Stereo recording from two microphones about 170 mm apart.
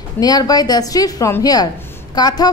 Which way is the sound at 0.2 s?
20° left (ahead or behind).